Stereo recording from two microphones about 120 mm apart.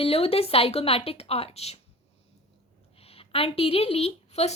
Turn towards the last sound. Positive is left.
turn(degrees=65)  # may be behind; listen again after turning